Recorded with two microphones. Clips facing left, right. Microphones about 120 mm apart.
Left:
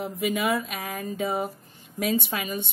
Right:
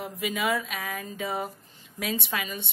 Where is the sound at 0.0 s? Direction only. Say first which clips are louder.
Left 3 dB; 55° left (ahead or behind).